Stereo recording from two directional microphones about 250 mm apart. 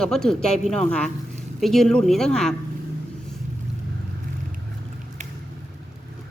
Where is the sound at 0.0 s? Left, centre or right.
Centre.